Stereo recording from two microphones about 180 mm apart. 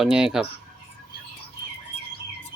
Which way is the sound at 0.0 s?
5° right (ahead or behind).